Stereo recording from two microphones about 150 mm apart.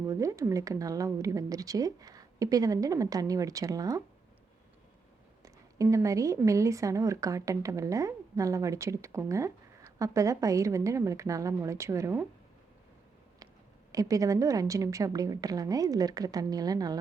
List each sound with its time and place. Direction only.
0.0 s a woman's voice: 20° right (ahead or behind)
5.4 s a woman's voice: 20° right (ahead or behind)
13.9 s a woman's voice: 20° right (ahead or behind)